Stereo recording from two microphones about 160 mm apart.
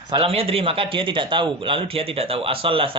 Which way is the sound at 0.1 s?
35° right (ahead or behind).